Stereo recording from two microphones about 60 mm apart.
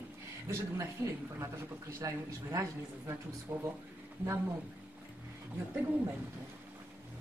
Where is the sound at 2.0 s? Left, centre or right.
Right.